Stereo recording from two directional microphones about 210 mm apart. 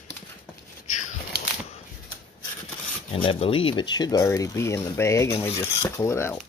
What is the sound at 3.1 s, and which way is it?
Speech, 25° left (ahead or behind).